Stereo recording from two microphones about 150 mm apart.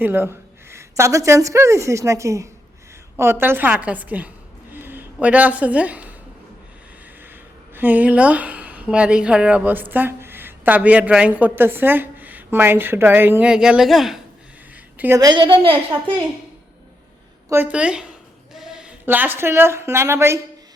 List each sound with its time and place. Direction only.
0.0 s a woman's voice: 15° right (ahead or behind)
7.2 s a woman's voice: 15° right (ahead or behind)
14.9 s a woman's voice: 15° right (ahead or behind)
15.2 s a woman's voice: 30° right (ahead or behind)
17.5 s a woman's voice: 10° right (ahead or behind)